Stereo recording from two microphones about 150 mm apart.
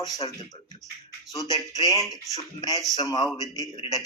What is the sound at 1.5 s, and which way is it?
Speech, 20° right (ahead or behind).